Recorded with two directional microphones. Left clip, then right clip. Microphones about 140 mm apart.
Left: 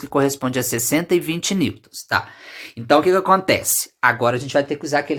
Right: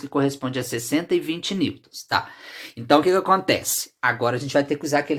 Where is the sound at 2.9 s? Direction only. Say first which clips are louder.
Left 3 dB; 15° left (ahead or behind).